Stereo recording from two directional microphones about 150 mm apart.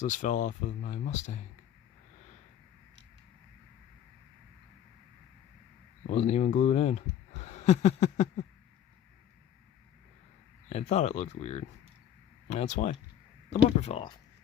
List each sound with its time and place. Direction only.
0.0 s speech: 60° left (ahead or behind)
6.1 s speech: 45° left (ahead or behind)
10.7 s speech: 45° left (ahead or behind)